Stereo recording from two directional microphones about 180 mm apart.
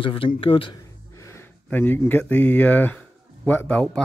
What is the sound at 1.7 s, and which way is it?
Speech, 10° left (ahead or behind).